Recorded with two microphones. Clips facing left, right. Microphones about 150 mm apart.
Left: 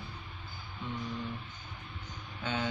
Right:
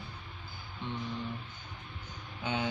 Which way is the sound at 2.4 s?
20° right (ahead or behind).